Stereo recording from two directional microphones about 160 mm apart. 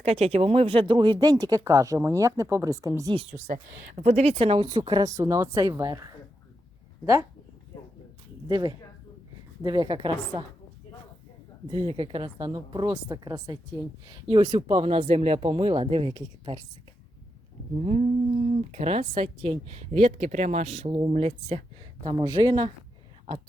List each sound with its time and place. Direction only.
0.0 s speech: 40° right (ahead or behind); by 3.2 s 20° right (ahead or behind)
3.2 s speech: 45° right (ahead or behind); by 7.3 s 20° right (ahead or behind)
8.4 s speech: 25° right (ahead or behind)
11.7 s speech: 35° right (ahead or behind)
17.7 s speech: 45° right (ahead or behind)
22.1 s speech: 20° right (ahead or behind)